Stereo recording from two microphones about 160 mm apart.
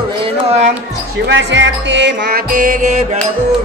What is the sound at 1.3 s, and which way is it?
Music, 90° right.